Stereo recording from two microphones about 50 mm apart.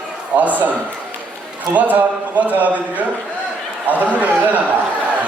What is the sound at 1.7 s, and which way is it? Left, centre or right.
Speech, right.